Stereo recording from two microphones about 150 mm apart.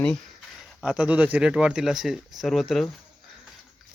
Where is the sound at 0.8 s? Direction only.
5° right (ahead or behind).